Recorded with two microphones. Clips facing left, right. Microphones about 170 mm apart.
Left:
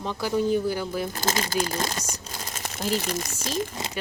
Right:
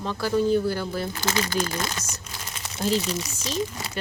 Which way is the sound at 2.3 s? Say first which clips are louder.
Left 3 dB; 45° left (ahead or behind).